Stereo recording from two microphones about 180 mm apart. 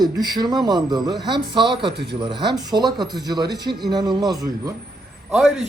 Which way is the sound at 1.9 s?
70° right (ahead or behind).